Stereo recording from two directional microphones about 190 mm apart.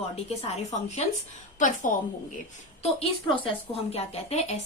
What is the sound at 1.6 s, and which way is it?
Speech, 40° left (ahead or behind).